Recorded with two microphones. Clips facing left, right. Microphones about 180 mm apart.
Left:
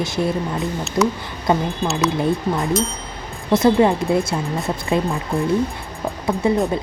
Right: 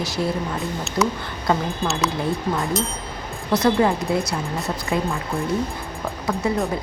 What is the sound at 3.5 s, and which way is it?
Speech, 25° left (ahead or behind).